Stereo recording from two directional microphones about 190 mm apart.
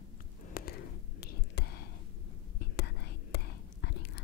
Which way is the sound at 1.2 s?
55° left (ahead or behind).